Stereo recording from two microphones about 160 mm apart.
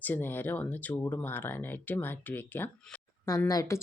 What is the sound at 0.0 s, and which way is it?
A woman's voice, 10° left (ahead or behind).